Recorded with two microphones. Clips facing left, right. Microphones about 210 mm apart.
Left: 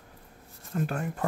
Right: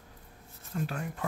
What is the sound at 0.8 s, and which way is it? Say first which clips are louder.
Speech: left 4 dB; 50° left (ahead or behind).